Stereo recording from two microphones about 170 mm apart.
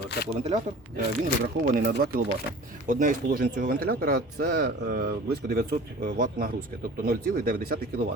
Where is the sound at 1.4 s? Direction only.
55° right (ahead or behind).